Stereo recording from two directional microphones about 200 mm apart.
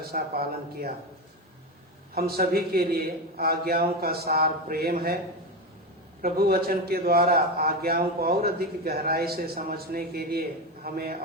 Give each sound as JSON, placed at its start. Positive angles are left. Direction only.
{"t": 0.0, "sound": "a man's voice", "side_deg": -50}
{"t": 2.1, "sound": "a man's voice", "side_deg": -50}
{"t": 6.2, "sound": "a man's voice", "side_deg": -50}